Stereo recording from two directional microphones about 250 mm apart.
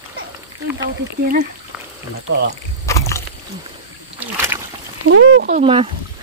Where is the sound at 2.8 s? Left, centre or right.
Centre.